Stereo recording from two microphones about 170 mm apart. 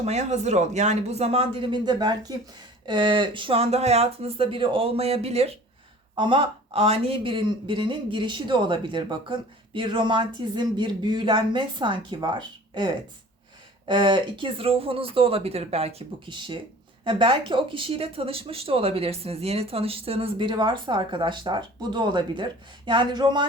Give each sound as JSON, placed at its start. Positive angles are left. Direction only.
{"t": 0.0, "sound": "speech", "side_deg": -40}